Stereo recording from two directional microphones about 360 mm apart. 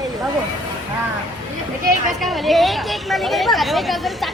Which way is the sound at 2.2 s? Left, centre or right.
Centre.